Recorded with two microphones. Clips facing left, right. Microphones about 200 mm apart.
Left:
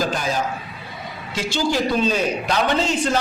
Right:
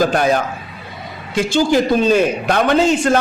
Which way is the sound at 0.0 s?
60° right (ahead or behind).